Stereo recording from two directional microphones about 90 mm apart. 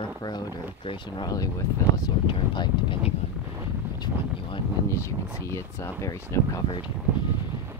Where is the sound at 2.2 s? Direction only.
65° left (ahead or behind).